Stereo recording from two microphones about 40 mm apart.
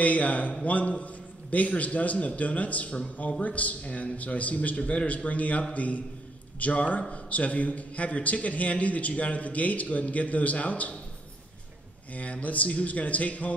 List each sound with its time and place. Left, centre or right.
0.0 s a man's voice: left
12.1 s a man's voice: left